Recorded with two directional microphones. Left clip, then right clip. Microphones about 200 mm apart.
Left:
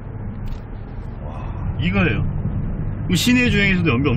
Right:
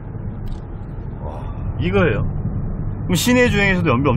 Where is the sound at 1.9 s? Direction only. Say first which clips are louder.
Right 4 dB; 20° right (ahead or behind).